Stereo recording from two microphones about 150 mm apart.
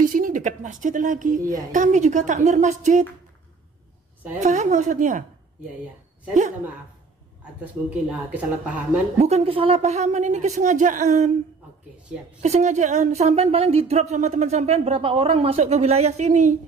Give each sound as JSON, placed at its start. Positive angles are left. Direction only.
{"t": 0.0, "sound": "speech", "side_deg": -65}
{"t": 4.4, "sound": "speech", "side_deg": -50}
{"t": 7.6, "sound": "speech", "side_deg": -10}
{"t": 9.2, "sound": "speech", "side_deg": -45}
{"t": 12.4, "sound": "speech", "side_deg": -50}